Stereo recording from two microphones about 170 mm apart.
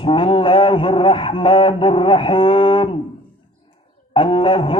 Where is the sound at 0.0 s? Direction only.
30° left (ahead or behind).